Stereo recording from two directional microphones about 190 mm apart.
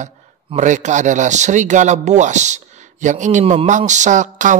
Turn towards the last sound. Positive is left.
turn(degrees=-40)  # may be behind; listen again after turning